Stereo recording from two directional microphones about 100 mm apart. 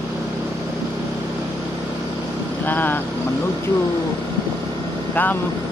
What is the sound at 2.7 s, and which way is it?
Vehicle, 20° left (ahead or behind).